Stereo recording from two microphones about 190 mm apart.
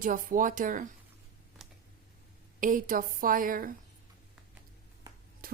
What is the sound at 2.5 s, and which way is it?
Speech, 45° right (ahead or behind).